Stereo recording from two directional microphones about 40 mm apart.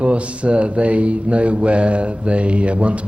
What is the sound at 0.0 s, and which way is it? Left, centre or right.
Speech, right.